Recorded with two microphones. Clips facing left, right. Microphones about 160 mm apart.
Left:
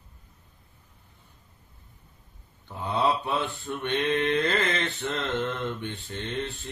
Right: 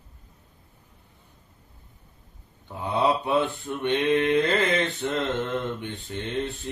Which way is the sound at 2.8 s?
15° right (ahead or behind).